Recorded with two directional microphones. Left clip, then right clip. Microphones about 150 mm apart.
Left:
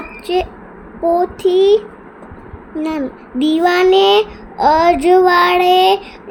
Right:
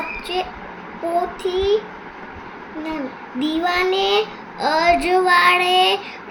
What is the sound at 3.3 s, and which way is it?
A child's voice, 90° left.